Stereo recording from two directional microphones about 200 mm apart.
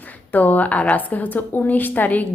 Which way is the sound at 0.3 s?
10° left (ahead or behind).